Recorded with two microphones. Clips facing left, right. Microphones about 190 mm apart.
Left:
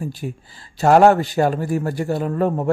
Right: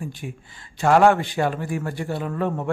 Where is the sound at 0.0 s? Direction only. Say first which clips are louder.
Left 5 dB; 35° left (ahead or behind).